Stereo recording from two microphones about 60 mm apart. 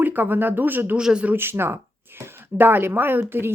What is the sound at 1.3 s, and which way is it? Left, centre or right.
A woman's voice, right.